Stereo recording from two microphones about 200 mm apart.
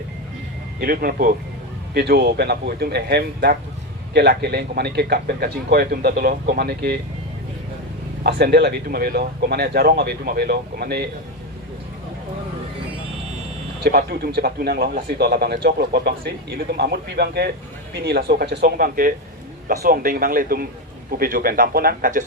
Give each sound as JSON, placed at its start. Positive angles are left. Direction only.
{"t": 0.8, "sound": "a man's voice", "side_deg": -45}
{"t": 8.2, "sound": "a man's voice", "side_deg": -55}
{"t": 13.8, "sound": "a man's voice", "side_deg": -50}